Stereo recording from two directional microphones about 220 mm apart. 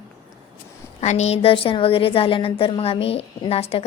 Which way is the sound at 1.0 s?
30° left (ahead or behind).